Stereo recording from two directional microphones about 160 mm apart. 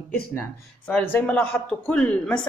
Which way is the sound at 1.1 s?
10° left (ahead or behind).